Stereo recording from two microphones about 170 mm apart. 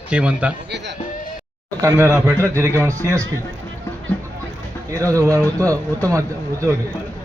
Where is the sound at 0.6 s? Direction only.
90° right.